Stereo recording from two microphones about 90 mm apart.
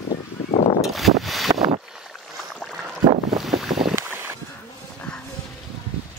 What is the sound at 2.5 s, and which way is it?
Boat, 5° left (ahead or behind).